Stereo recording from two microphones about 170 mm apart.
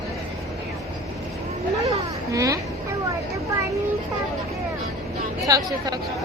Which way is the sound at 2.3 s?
20° right (ahead or behind).